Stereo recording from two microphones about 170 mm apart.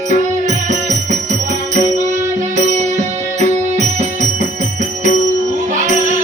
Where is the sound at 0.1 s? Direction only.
45° right (ahead or behind).